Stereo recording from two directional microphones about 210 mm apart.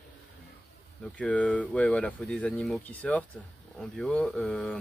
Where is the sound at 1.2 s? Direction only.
5° left (ahead or behind).